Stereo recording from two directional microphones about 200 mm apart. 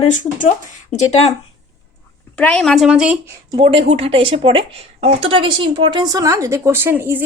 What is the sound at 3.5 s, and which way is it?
Speech, 25° right (ahead or behind).